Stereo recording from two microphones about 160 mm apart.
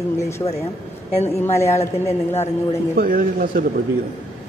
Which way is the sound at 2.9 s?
60° right (ahead or behind).